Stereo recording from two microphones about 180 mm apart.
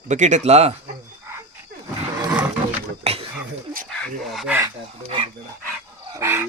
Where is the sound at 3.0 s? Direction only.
35° right (ahead or behind).